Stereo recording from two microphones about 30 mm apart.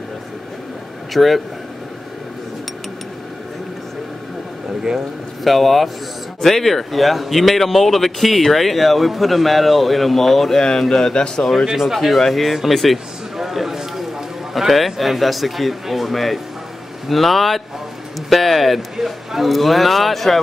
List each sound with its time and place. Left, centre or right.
1.1 s speech: centre
5.4 s speech: centre
10.8 s speech: centre
11.4 s speech: centre
12.9 s a sound: centre
14.5 s speech: centre